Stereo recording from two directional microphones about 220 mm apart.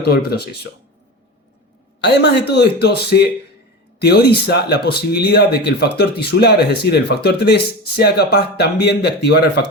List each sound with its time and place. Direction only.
0.0 s speech: 45° left (ahead or behind)
2.0 s a man's voice: 50° left (ahead or behind)